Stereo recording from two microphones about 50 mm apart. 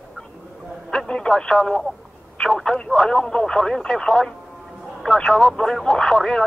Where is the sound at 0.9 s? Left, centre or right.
Centre.